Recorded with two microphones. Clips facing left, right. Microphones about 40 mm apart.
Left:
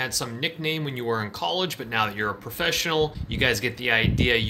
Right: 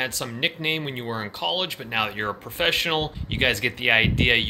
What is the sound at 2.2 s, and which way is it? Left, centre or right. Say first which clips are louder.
Speech: right 2 dB; right.